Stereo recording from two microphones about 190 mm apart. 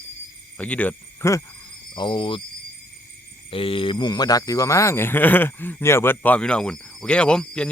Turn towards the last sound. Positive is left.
turn(degrees=5)  # may be behind; listen again after turning